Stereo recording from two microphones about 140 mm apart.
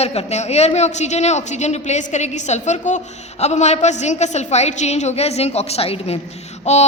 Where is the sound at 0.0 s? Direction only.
45° left (ahead or behind).